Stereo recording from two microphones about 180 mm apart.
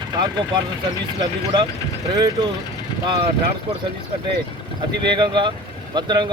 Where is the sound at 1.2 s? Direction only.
25° right (ahead or behind).